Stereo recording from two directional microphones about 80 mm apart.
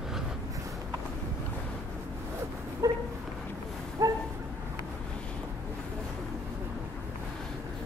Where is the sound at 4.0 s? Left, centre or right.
Right.